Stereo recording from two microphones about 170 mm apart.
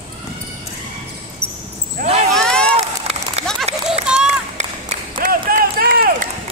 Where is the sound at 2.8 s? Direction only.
35° right (ahead or behind).